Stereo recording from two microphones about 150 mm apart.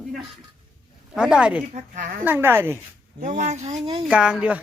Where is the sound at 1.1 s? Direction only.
5° right (ahead or behind).